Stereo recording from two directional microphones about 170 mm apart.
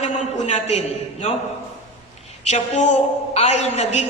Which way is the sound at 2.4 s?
45° left (ahead or behind).